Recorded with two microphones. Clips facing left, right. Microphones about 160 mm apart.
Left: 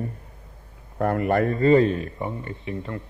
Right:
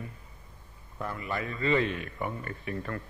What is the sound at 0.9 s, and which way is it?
A man's voice, 60° left (ahead or behind).